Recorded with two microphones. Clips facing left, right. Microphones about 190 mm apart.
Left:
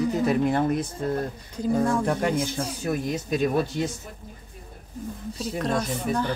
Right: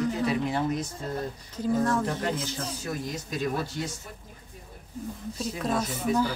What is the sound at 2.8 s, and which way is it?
Speech, 60° left (ahead or behind).